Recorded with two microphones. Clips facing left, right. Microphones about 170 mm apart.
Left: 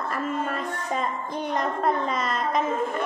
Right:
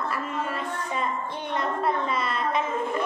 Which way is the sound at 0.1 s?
45° left (ahead or behind).